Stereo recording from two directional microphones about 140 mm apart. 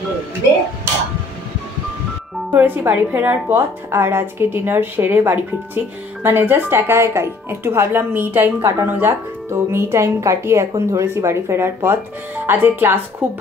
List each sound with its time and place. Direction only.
2.5 s a woman's voice: 15° right (ahead or behind)